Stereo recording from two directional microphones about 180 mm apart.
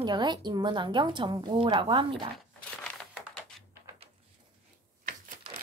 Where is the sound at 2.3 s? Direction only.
5° left (ahead or behind).